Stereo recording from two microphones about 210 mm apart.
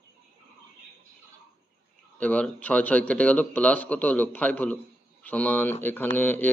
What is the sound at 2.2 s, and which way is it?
Speech, 5° left (ahead or behind).